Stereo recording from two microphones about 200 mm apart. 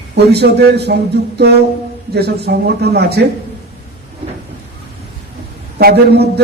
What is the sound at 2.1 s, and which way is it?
A man's voice, 55° right (ahead or behind).